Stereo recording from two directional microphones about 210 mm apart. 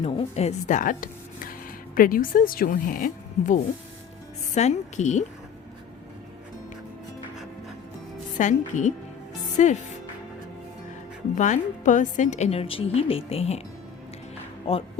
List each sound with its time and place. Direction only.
0.0 s a woman's voice: 30° left (ahead or behind)
8.4 s a woman's voice: 35° left (ahead or behind)
11.3 s a woman's voice: 35° left (ahead or behind)
14.7 s speech: 25° left (ahead or behind)